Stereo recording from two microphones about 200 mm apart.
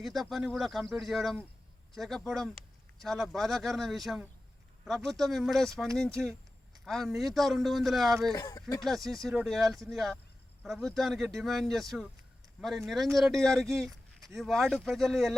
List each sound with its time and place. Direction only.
0.0 s speech: centre (ahead or behind)
8.4 s speech: 15° left (ahead or behind)
9.0 s speech: centre (ahead or behind)